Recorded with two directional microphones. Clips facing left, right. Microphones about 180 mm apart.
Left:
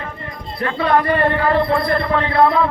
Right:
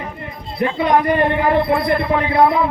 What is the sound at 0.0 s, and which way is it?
Speech, 15° right (ahead or behind).